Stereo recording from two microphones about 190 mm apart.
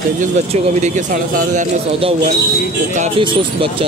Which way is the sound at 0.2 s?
40° right (ahead or behind).